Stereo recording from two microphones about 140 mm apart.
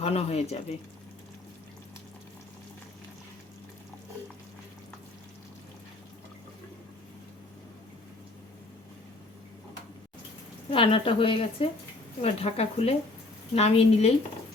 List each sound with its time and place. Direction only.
0.0 s speech: 50° left (ahead or behind)
10.7 s a woman's voice: 40° left (ahead or behind)